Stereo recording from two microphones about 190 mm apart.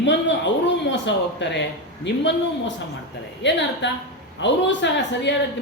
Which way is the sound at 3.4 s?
70° left (ahead or behind).